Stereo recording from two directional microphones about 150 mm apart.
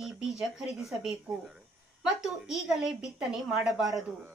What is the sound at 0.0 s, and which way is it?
A woman's voice, 5° right (ahead or behind).